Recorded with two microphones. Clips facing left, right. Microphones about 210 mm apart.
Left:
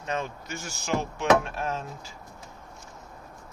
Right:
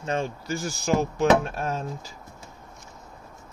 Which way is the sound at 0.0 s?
30° right (ahead or behind).